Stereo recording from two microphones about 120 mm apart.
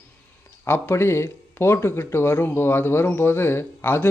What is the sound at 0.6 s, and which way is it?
Speech, 20° left (ahead or behind).